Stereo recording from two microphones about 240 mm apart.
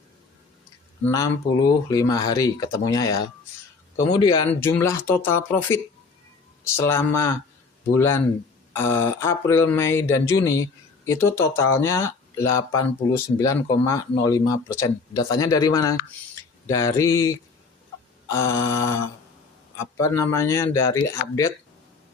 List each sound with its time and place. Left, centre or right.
1.0 s speech: centre